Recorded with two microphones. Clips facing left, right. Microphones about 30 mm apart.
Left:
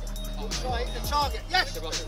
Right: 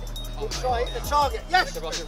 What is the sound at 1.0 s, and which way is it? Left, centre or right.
Speech, left.